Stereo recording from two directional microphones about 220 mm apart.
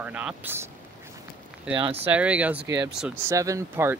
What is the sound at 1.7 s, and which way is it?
Speech, 25° right (ahead or behind).